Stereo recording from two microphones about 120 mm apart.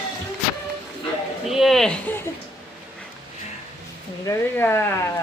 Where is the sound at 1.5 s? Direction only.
Centre (ahead or behind).